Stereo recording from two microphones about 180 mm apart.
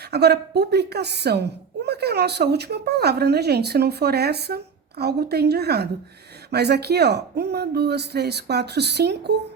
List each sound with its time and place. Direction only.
0.1 s a woman's voice: 65° right (ahead or behind)